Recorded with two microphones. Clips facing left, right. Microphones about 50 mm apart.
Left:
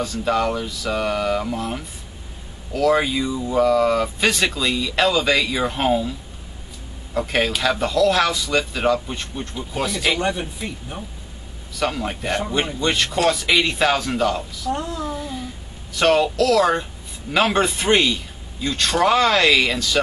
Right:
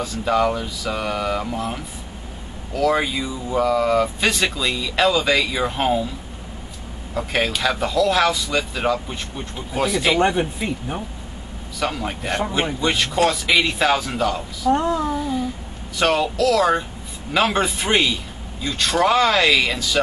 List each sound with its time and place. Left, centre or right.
0.0 s speech: centre
7.2 s speech: centre
10.1 s speech: right
11.8 s speech: centre
14.7 s speech: right
15.0 s speech: centre